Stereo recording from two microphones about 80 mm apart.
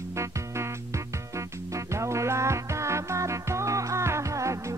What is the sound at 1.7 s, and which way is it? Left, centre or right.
Music, right.